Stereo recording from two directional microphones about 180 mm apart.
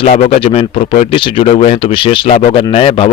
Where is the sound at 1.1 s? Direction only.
30° left (ahead or behind).